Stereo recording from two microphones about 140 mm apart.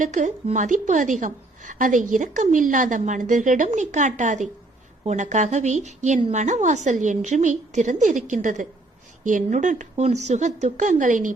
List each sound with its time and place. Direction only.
0.0 s a woman's voice: 65° right (ahead or behind)